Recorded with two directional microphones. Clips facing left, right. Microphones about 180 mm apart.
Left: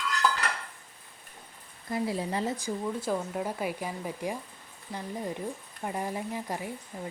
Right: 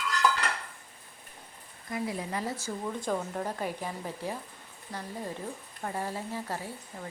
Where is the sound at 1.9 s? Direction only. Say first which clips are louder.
Left 3 dB; 30° left (ahead or behind).